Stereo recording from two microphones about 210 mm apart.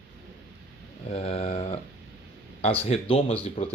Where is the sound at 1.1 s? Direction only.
30° left (ahead or behind).